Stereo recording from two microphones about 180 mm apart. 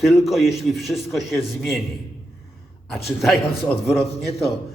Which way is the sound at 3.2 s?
Centre (ahead or behind).